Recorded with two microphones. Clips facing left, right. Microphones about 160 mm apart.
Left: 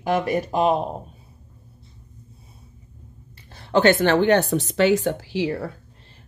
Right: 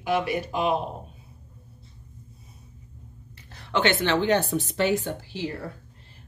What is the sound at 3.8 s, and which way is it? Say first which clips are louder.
Speech: left 6 dB; 50° left (ahead or behind).